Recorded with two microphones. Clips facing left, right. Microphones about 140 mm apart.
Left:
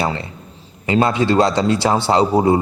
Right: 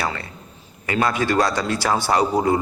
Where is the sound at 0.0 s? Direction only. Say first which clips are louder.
Left 5 dB; 25° left (ahead or behind).